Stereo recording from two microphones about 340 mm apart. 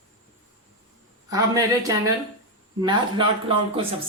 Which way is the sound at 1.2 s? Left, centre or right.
Centre.